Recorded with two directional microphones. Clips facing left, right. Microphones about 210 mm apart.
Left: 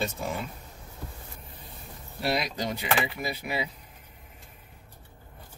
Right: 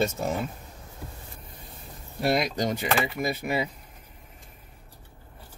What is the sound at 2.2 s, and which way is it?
Speech, 45° right (ahead or behind).